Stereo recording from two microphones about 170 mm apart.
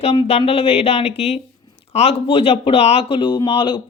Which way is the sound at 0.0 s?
35° left (ahead or behind).